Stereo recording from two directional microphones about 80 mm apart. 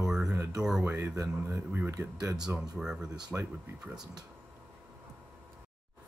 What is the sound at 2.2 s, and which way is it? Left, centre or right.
Speech, right.